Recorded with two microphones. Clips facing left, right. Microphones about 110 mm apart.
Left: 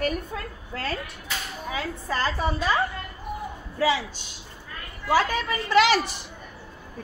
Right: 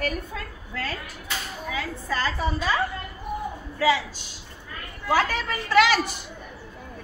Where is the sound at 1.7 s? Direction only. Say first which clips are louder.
Even; 30° left (ahead or behind).